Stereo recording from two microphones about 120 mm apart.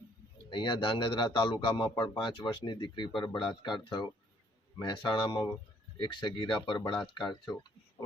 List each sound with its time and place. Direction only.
0.5 s speech: 40° left (ahead or behind)